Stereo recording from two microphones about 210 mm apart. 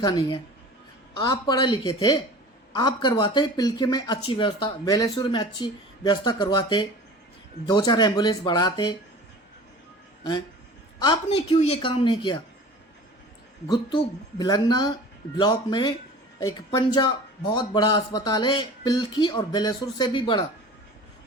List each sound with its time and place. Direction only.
0.0 s speech: 20° left (ahead or behind)
11.0 s speech: 25° left (ahead or behind)
13.7 s speech: 20° left (ahead or behind)